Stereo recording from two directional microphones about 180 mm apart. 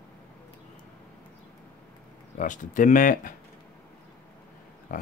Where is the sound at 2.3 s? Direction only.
45° left (ahead or behind).